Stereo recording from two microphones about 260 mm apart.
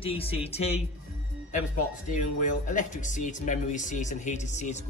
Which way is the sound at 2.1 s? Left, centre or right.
Left.